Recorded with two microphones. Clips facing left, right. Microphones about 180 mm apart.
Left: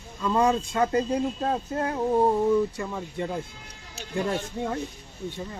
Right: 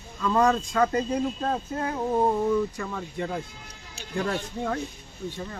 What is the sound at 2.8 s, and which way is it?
Speech, 20° left (ahead or behind).